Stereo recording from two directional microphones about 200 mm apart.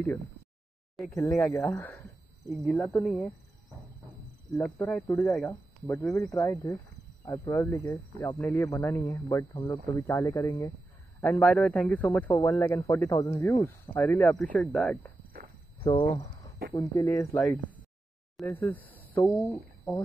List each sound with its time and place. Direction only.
1.1 s speech: 15° left (ahead or behind)
5.0 s speech: 5° left (ahead or behind)
6.0 s speech: 15° left (ahead or behind)
15.8 s speech: 25° left (ahead or behind)